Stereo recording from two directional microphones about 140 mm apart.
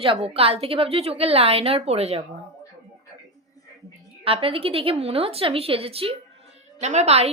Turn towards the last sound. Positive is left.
turn(degrees=-50)  # may be behind; listen again after turning